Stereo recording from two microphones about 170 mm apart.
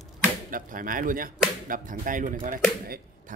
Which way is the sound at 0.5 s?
55° right (ahead or behind).